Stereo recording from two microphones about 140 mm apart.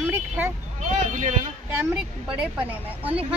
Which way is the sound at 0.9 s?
60° right (ahead or behind).